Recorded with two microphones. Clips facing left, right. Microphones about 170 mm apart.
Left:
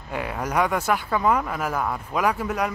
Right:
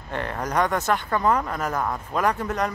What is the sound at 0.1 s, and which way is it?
Speech, 10° left (ahead or behind).